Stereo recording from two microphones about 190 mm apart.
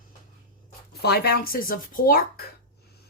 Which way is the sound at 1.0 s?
55° left (ahead or behind).